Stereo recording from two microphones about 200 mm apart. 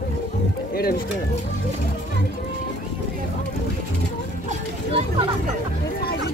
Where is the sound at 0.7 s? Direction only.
50° left (ahead or behind).